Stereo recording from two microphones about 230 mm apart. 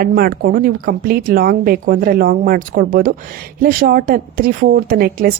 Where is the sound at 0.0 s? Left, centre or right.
Right.